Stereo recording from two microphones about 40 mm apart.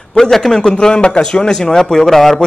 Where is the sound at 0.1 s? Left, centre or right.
Centre.